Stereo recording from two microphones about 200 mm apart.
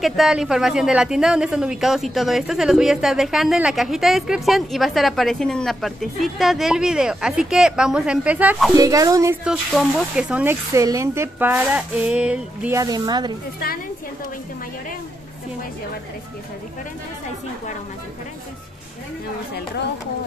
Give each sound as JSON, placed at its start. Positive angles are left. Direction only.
{"t": 0.0, "sound": "a woman's voice", "side_deg": 0}
{"t": 8.7, "sound": "speech", "side_deg": -15}